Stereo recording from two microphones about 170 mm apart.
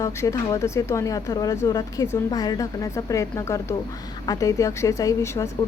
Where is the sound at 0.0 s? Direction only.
20° left (ahead or behind).